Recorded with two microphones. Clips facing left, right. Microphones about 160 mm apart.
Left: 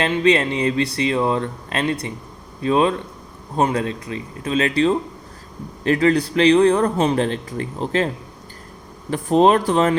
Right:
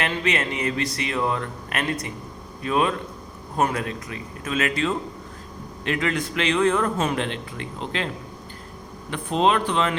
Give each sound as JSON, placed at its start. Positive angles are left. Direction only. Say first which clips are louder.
{"t": 0.0, "sound": "a man's voice", "louder": "left 8 dB", "side_deg": 30}